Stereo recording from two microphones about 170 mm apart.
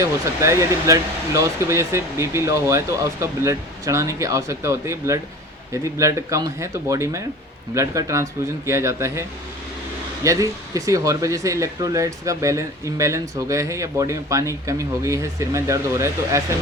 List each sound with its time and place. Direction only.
0.0 s speech: 20° right (ahead or behind)
10.2 s speech: 20° right (ahead or behind)